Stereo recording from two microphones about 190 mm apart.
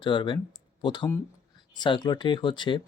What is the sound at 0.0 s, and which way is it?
Speech, 25° left (ahead or behind).